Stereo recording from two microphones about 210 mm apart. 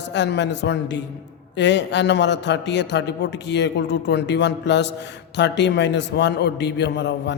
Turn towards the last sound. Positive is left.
turn(degrees=55)  # may be behind; listen again after turning